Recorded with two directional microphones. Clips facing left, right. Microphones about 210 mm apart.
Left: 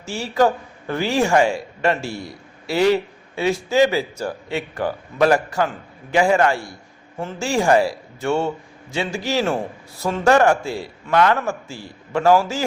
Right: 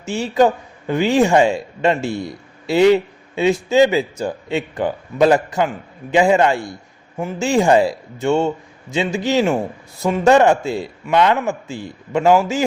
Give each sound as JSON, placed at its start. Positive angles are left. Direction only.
{"t": 0.0, "sound": "a man's voice", "side_deg": -20}